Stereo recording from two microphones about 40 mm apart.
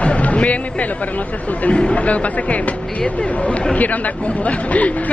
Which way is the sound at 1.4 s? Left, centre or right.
Left.